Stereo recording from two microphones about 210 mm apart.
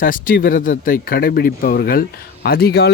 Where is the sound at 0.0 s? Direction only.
40° left (ahead or behind).